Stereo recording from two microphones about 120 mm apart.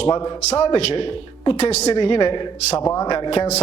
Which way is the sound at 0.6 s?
55° left (ahead or behind).